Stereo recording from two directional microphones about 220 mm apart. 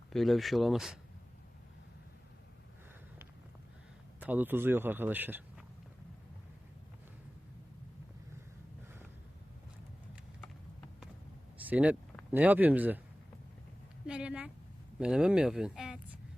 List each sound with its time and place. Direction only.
0.1 s speech: centre (ahead or behind)
4.2 s a man's voice: 5° right (ahead or behind)
11.6 s speech: 5° right (ahead or behind)
14.1 s speech: 5° right (ahead or behind)